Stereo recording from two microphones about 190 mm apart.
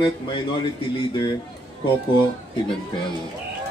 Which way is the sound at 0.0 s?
25° left (ahead or behind).